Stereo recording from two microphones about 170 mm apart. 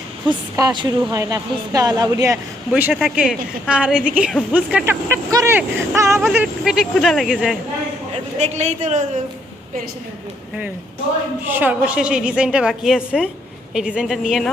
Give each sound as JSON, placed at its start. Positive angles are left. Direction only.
{"t": 0.3, "sound": "speech", "side_deg": -15}
{"t": 0.7, "sound": "speech", "side_deg": -25}
{"t": 2.9, "sound": "speech", "side_deg": 0}
{"t": 8.4, "sound": "speech", "side_deg": -45}
{"t": 11.4, "sound": "a woman's voice", "side_deg": -10}